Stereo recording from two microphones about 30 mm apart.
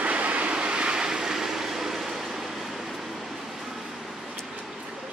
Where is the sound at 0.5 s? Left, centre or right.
Right.